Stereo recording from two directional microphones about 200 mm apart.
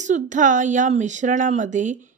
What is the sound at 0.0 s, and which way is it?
Speech, 40° right (ahead or behind).